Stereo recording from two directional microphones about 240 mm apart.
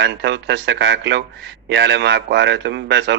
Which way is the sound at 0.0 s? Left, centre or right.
Right.